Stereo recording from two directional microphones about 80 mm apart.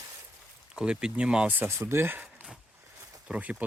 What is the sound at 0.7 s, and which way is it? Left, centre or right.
Speech, centre.